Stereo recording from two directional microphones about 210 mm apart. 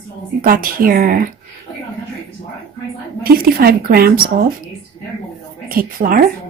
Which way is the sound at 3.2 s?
45° right (ahead or behind).